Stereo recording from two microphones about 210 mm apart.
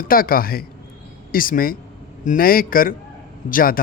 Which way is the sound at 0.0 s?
45° left (ahead or behind).